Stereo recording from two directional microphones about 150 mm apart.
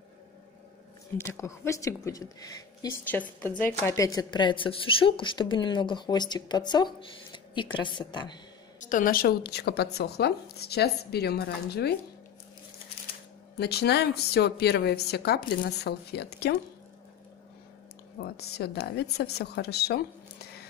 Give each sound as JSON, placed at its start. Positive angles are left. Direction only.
{"t": 1.1, "sound": "speech", "side_deg": 15}
{"t": 3.1, "sound": "a woman's voice", "side_deg": 10}
{"t": 8.7, "sound": "a woman's voice", "side_deg": 60}
{"t": 13.6, "sound": "a woman's voice", "side_deg": 90}
{"t": 18.2, "sound": "a woman's voice", "side_deg": 90}